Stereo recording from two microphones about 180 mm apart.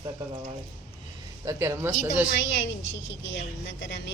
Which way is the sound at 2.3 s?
90° left.